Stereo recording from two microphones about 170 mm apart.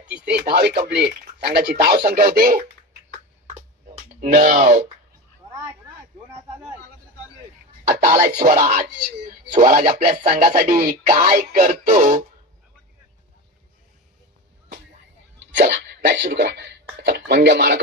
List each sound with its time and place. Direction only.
0.4 s speech: 70° right (ahead or behind)
3.9 s speech: 50° right (ahead or behind)
7.9 s speech: 45° right (ahead or behind)
15.6 s speech: 85° right